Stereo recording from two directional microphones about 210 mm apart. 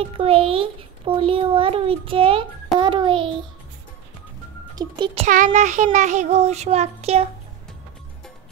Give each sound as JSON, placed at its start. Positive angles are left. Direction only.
{"t": 0.0, "sound": "a child's voice", "side_deg": -25}
{"t": 4.7, "sound": "a child's voice", "side_deg": -20}